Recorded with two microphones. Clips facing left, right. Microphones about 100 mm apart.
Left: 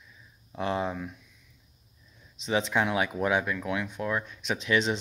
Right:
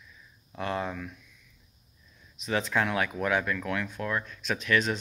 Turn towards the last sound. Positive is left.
turn(degrees=20)  # may be behind; listen again after turning